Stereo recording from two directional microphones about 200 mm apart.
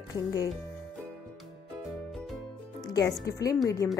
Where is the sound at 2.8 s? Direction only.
15° left (ahead or behind).